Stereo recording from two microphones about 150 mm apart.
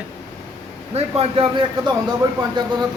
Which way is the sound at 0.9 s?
40° right (ahead or behind).